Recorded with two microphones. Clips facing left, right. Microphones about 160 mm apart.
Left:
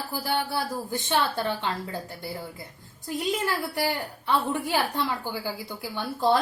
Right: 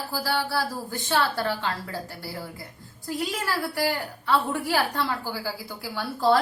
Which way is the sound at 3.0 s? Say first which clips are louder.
Left 1 dB; 20° left (ahead or behind).